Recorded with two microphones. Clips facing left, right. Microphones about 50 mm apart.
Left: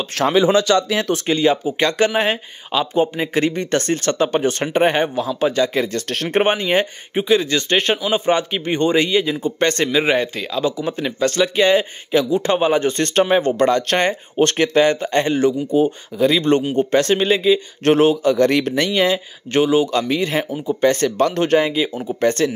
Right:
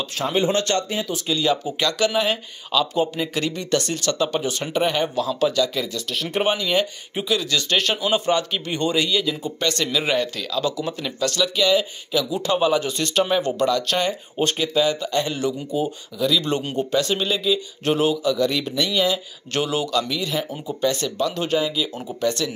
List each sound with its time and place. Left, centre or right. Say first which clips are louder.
0.1 s speech: left 8 dB; left
0.8 s speech: left 6 dB; left
1.1 s speech: left 4 dB; left
1.4 s speech: left 3 dB; left
5.1 s speech: left 2 dB; left
5.9 s speech: left 4 dB; left
6.2 s speech: left 5 dB; left
9.9 s speech: left 5 dB; left
15.0 s speech: left 6 dB; left
17.8 s speech: left 6 dB; left
18.9 s speech: left 4 dB; left
19.5 s speech: left 7 dB; left